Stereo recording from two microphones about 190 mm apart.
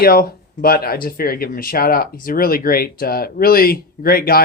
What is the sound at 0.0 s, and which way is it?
Speech, 50° left (ahead or behind).